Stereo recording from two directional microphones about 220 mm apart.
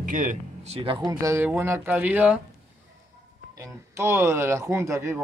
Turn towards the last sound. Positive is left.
turn(degrees=-15)  # may be behind; listen again after turning